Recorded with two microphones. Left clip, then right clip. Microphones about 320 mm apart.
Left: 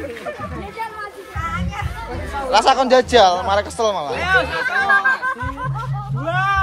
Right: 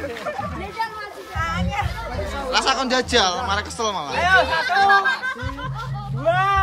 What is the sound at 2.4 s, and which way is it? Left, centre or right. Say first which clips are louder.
Speech: left 7 dB; centre.